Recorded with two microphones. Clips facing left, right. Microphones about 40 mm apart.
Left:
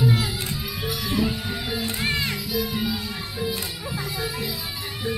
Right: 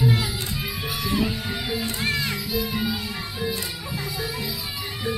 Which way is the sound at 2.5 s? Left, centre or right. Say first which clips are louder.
Even; centre.